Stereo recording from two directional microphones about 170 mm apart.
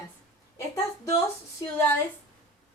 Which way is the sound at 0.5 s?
15° left (ahead or behind).